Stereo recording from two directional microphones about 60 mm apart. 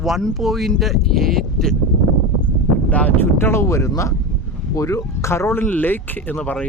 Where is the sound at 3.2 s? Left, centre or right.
Left.